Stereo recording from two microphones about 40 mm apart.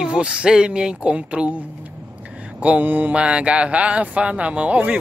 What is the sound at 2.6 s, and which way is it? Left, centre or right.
Mantra, right.